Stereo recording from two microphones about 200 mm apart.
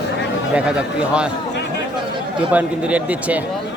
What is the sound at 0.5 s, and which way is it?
Speech, 5° right (ahead or behind).